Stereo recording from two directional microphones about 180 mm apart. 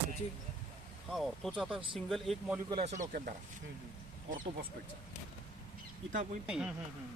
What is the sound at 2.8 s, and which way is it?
Speech, 45° right (ahead or behind).